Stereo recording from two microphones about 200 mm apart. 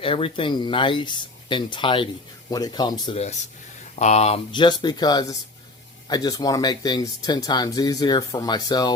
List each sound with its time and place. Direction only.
0.0 s speech: 25° left (ahead or behind)